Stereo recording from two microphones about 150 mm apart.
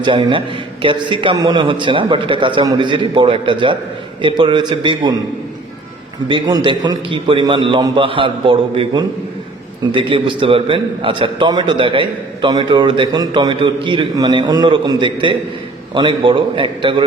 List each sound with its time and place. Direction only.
0.0 s a man's voice: 35° right (ahead or behind)
6.2 s a man's voice: 30° right (ahead or behind)